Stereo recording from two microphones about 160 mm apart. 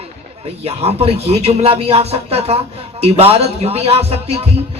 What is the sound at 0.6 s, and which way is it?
A man's voice, 40° right (ahead or behind).